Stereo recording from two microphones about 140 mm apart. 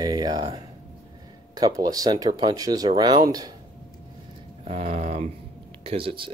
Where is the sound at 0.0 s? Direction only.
30° right (ahead or behind).